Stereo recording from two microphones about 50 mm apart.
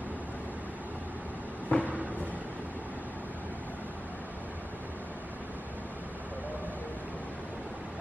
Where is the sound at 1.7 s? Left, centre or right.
Left.